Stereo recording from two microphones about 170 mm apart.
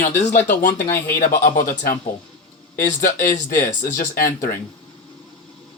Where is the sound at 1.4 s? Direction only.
55° left (ahead or behind).